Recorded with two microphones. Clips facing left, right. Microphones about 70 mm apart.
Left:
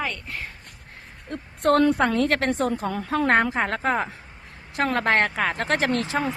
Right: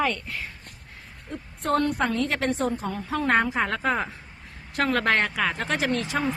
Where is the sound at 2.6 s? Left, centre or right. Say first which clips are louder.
Left 2 dB; left.